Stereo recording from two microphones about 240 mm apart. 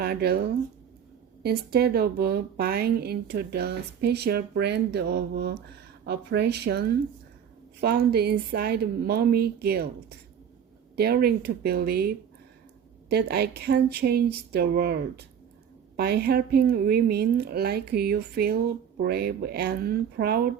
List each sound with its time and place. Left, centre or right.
0.0 s speech: right